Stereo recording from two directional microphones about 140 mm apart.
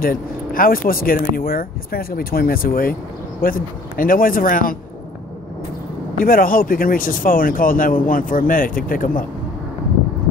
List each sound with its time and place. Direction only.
0.0 s speech: 90° left
6.1 s speech: 90° left